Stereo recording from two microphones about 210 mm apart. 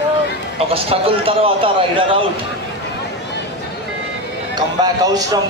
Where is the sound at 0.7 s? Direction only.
25° right (ahead or behind).